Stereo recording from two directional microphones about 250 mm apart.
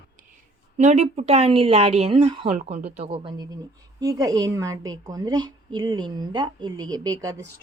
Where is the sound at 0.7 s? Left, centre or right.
Right.